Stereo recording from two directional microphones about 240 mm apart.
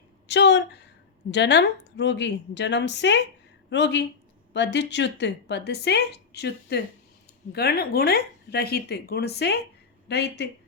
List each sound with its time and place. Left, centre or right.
0.3 s a woman's voice: left